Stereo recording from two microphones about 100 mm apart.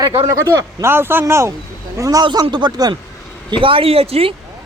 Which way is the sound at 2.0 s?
35° right (ahead or behind).